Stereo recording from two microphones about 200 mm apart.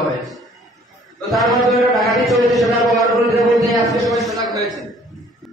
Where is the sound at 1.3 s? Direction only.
Centre (ahead or behind).